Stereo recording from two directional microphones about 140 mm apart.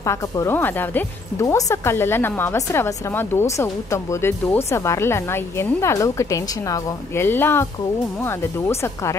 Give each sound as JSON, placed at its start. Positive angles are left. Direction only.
{"t": 0.0, "sound": "speech", "side_deg": 20}